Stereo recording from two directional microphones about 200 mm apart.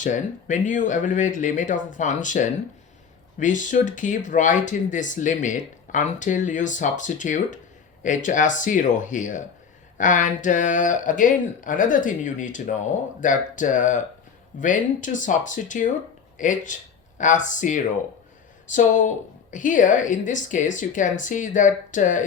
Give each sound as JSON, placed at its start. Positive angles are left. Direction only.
{"t": 0.0, "sound": "speech", "side_deg": 40}